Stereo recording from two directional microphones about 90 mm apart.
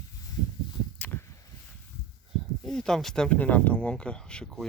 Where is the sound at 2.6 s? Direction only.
5° left (ahead or behind).